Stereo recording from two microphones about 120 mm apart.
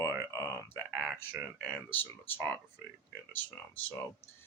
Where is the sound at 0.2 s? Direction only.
25° right (ahead or behind).